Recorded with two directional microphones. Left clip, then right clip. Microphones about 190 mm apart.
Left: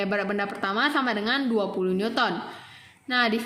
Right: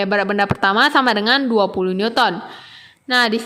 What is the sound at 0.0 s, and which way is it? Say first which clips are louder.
A woman's voice: right 9 dB; 40° right (ahead or behind).